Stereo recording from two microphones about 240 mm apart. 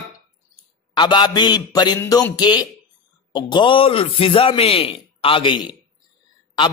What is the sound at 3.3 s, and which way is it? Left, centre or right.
Music, centre.